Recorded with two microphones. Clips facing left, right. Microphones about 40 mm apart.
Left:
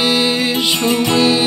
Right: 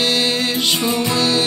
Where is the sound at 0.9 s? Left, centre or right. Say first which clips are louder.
Left 4 dB; left.